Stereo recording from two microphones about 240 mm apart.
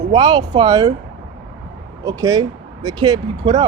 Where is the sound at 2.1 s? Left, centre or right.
Centre.